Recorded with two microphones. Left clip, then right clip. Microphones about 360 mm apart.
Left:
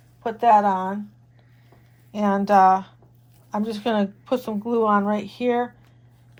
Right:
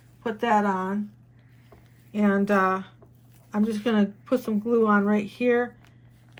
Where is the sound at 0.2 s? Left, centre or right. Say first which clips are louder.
Left 7 dB; left.